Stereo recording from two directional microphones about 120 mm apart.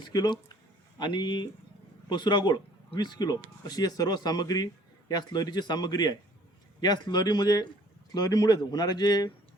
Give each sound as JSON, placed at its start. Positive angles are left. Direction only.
{"t": 0.1, "sound": "a man's voice", "side_deg": 35}